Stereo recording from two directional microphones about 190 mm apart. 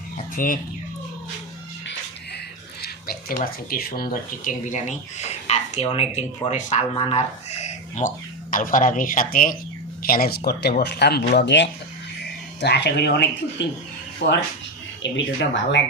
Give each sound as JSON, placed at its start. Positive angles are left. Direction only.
{"t": 0.2, "sound": "speech", "side_deg": 45}
{"t": 2.8, "sound": "speech", "side_deg": 55}
{"t": 15.0, "sound": "speech", "side_deg": 70}